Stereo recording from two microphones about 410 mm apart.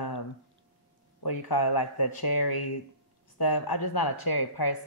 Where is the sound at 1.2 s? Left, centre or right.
Left.